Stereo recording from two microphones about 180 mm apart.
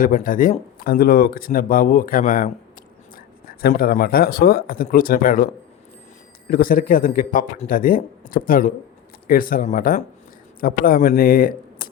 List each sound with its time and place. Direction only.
0.0 s speech: 50° left (ahead or behind)
6.5 s speech: 50° left (ahead or behind)